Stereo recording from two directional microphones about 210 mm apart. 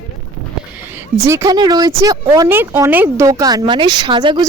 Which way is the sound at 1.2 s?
15° right (ahead or behind).